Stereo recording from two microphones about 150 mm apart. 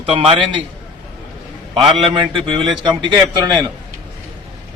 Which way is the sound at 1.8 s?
35° right (ahead or behind).